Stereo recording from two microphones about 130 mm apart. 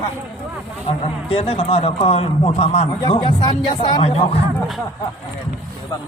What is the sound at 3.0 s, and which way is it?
Speech, 35° left (ahead or behind).